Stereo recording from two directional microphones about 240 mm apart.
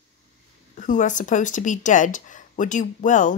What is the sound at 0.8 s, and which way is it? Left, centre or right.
Speech, left.